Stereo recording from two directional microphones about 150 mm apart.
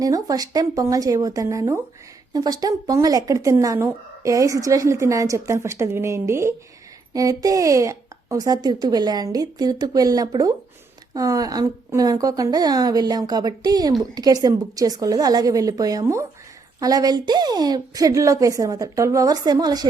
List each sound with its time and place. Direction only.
0.0 s a woman's voice: 25° right (ahead or behind)